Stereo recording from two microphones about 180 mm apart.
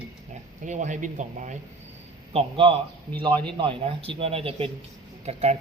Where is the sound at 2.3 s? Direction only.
30° right (ahead or behind).